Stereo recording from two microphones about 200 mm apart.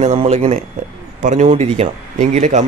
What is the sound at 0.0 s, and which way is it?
A man's voice, 30° right (ahead or behind).